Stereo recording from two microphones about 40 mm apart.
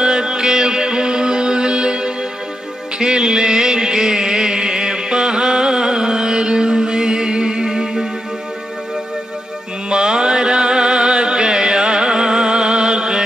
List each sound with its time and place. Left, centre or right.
0.0 s music: centre
9.8 s music: centre